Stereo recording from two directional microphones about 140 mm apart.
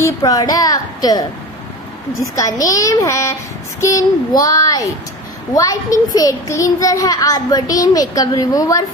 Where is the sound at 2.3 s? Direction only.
25° left (ahead or behind).